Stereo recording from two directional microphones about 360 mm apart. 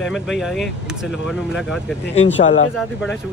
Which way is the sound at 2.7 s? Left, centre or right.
Centre.